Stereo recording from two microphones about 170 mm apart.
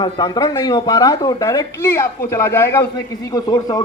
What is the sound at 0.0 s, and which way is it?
Speech, 25° left (ahead or behind).